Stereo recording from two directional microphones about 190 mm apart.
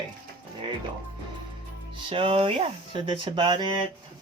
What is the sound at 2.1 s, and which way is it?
Speech, 30° right (ahead or behind).